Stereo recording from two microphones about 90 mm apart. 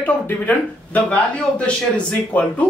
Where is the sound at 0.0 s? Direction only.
15° left (ahead or behind).